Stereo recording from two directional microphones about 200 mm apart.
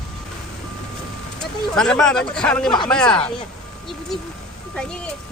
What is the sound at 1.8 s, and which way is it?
Speech, 5° left (ahead or behind).